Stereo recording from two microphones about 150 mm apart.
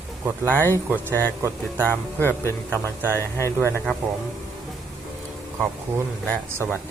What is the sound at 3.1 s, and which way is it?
Speech, 15° left (ahead or behind).